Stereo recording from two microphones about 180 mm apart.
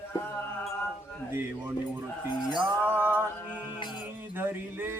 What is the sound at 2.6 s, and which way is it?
Music, 10° right (ahead or behind).